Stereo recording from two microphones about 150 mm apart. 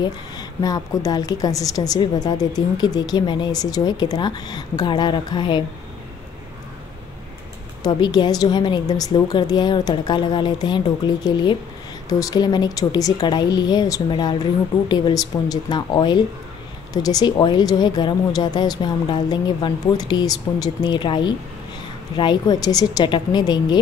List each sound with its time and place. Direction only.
0.0 s a woman's voice: 25° left (ahead or behind)
7.8 s a woman's voice: 30° left (ahead or behind)